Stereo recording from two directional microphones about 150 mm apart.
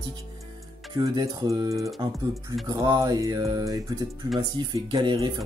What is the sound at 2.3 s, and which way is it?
Speech, centre (ahead or behind).